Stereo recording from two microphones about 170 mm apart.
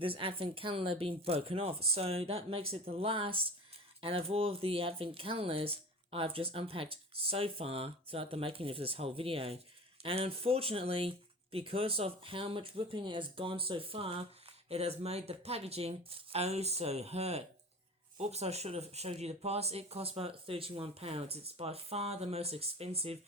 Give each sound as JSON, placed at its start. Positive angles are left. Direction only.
{"t": 0.0, "sound": "speech", "side_deg": -30}